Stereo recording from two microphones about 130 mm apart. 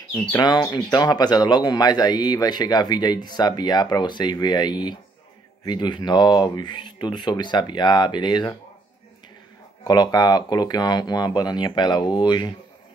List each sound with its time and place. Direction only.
0.3 s speech: 30° left (ahead or behind)
9.8 s speech: 30° left (ahead or behind)